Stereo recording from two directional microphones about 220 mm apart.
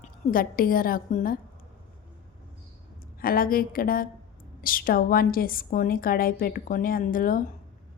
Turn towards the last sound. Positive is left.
turn(degrees=40)  # may be behind; listen again after turning